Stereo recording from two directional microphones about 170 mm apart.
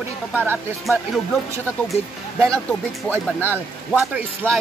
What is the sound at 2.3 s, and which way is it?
Speech, 15° right (ahead or behind).